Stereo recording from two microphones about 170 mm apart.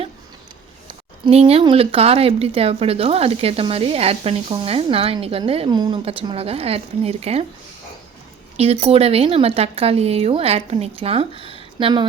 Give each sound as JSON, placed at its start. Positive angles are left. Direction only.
{"t": 0.9, "sound": "speech", "side_deg": -35}
{"t": 8.5, "sound": "speech", "side_deg": -35}